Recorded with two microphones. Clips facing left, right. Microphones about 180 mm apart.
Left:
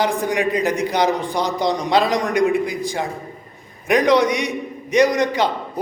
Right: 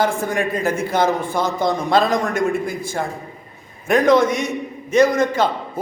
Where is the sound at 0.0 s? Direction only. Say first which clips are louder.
Even; 15° left (ahead or behind).